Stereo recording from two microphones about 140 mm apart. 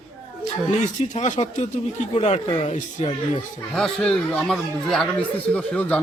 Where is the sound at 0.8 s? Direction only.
55° left (ahead or behind).